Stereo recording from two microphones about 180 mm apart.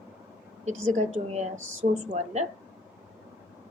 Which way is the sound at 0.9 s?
40° right (ahead or behind).